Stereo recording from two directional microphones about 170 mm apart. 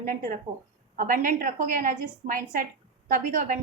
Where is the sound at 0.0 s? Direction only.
50° right (ahead or behind).